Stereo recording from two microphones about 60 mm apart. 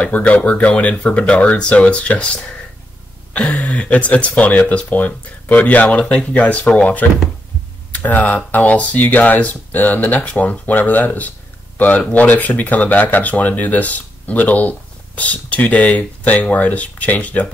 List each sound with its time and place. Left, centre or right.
0.0 s speech: left